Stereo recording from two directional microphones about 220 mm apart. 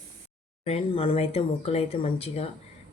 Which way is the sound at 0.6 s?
25° left (ahead or behind).